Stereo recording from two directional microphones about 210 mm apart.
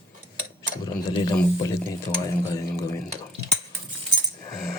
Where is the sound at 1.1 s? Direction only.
20° left (ahead or behind).